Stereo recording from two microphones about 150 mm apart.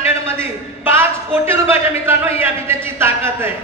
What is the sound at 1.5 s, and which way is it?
A man's voice, 15° right (ahead or behind).